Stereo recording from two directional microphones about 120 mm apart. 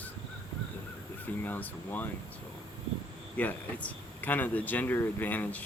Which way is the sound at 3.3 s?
10° left (ahead or behind).